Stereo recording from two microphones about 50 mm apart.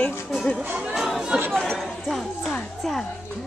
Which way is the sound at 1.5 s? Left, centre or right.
Centre.